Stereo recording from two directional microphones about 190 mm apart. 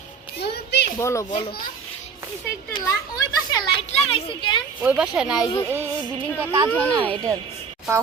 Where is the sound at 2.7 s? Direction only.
20° left (ahead or behind).